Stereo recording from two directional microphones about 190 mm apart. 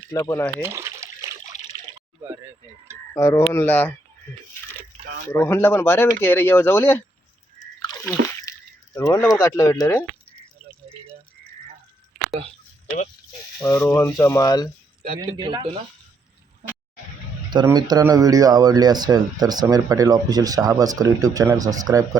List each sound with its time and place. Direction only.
0.1 s speech: 15° left (ahead or behind)
0.6 s a sound: 15° right (ahead or behind)
3.1 s speech: 15° left (ahead or behind)
5.3 s speech: 15° left (ahead or behind)
8.0 s a sound: 15° left (ahead or behind)
9.4 s speech: 15° left (ahead or behind)
13.6 s speech: 15° left (ahead or behind)
15.2 s a man's voice: 25° right (ahead or behind)
17.5 s a man's voice: 20° right (ahead or behind)